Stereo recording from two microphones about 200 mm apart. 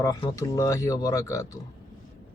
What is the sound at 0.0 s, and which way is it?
Speech, 15° left (ahead or behind).